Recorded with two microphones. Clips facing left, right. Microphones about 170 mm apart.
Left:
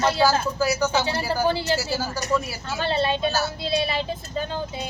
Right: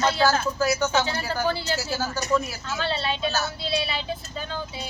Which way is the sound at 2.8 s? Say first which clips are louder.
Left 5 dB; 50° left (ahead or behind).